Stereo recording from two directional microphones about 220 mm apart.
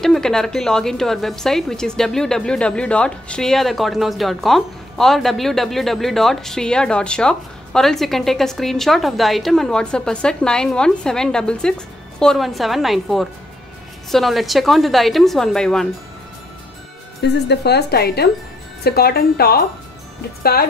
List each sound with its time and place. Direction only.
0.0 s a woman's voice: centre (ahead or behind)
17.2 s speech: 50° left (ahead or behind)